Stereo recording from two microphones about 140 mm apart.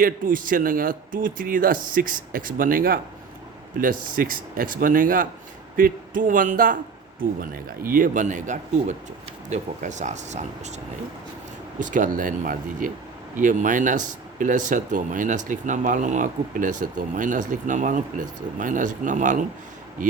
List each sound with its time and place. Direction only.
0.0 s speech: 80° right
7.2 s speech: 90° right; by 10.8 s 55° right (ahead or behind)
11.8 s speech: 65° right (ahead or behind)